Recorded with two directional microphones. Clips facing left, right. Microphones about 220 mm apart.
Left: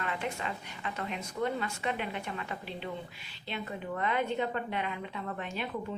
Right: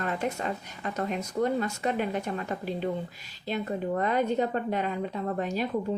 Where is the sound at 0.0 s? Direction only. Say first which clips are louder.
Right 5 dB; 40° right (ahead or behind).